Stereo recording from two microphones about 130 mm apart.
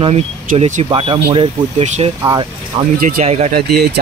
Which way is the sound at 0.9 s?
40° right (ahead or behind).